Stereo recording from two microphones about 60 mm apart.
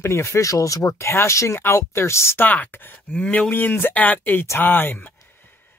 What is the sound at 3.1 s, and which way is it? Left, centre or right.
Speech, left.